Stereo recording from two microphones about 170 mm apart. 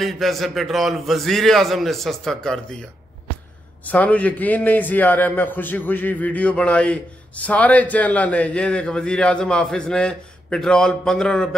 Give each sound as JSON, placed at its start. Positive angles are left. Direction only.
{"t": 0.0, "sound": "a man's voice", "side_deg": 0}
{"t": 3.8, "sound": "a man's voice", "side_deg": 10}